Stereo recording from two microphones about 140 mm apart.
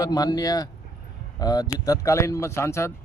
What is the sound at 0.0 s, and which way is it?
Speech, 30° left (ahead or behind).